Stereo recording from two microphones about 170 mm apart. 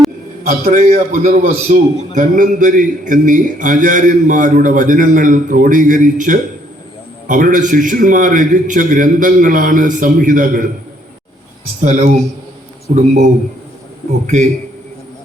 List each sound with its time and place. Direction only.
0.4 s a man's voice: 50° right (ahead or behind)
11.8 s a man's voice: 50° right (ahead or behind)